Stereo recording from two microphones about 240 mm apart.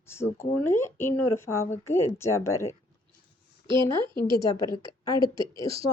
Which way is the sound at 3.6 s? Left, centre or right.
Centre.